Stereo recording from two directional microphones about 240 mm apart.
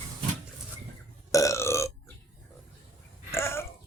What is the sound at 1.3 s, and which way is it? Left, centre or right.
Burping, centre.